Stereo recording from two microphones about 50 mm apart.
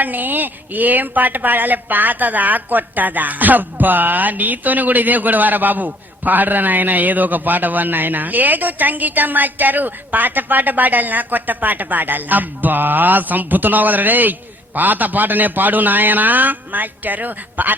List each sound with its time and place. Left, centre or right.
0.0 s speech: right